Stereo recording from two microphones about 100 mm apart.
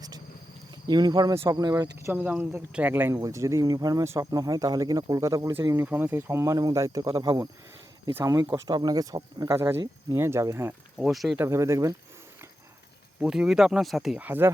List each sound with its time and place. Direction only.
0.9 s speech: 45° right (ahead or behind)
2.1 s speech: 15° right (ahead or behind)
3.2 s speech: 30° right (ahead or behind)
9.6 s speech: 25° right (ahead or behind)
10.9 s speech: 5° right (ahead or behind)
11.3 s speech: 30° right (ahead or behind)
13.1 s speech: 10° right (ahead or behind)
14.2 s speech: 20° right (ahead or behind)